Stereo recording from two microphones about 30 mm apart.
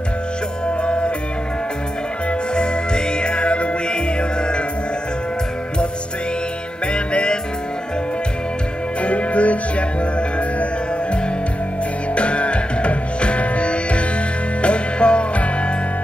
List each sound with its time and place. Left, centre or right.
0.8 s music: left
2.5 s music: left
6.9 s music: left
9.0 s music: left
12.2 s music: left